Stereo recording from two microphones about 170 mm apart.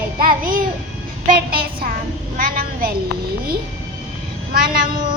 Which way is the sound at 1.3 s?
60° right (ahead or behind).